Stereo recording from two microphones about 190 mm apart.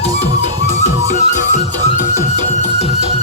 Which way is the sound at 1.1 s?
40° left (ahead or behind).